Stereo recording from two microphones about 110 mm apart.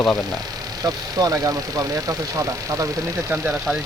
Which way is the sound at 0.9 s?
35° right (ahead or behind).